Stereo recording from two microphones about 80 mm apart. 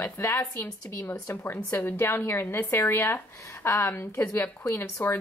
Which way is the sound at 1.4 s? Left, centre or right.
Left.